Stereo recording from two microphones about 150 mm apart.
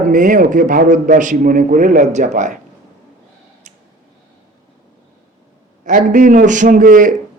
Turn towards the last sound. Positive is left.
turn(degrees=-65)  # may be behind; listen again after turning